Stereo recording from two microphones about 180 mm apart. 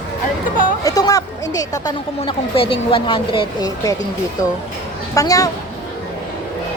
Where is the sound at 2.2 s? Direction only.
30° left (ahead or behind).